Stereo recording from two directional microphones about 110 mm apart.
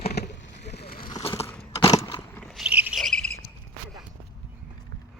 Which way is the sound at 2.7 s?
15° right (ahead or behind).